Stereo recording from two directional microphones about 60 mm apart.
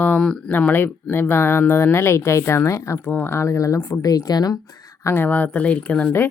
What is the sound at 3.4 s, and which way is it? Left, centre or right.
Speech, left.